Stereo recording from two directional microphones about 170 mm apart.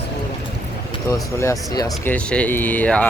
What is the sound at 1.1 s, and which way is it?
Speech, 20° left (ahead or behind).